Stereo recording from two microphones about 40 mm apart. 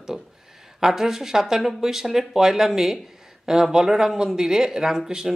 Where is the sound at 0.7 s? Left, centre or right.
Centre.